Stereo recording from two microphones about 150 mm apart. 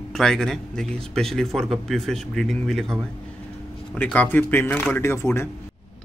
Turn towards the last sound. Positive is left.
turn(degrees=15)  # may be behind; listen again after turning